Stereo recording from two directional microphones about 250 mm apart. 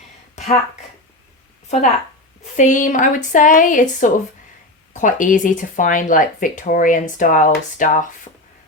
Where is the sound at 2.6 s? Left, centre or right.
Left.